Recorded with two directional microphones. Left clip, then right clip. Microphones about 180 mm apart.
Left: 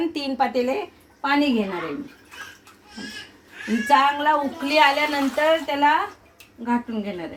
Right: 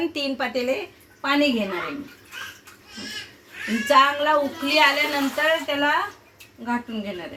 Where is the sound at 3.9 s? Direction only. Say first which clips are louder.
Even; 65° left (ahead or behind).